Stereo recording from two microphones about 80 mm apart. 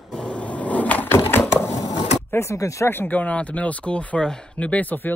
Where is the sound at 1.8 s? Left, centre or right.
Left.